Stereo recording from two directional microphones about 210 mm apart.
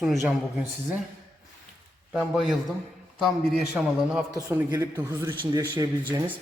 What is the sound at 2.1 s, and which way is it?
Speech, centre (ahead or behind).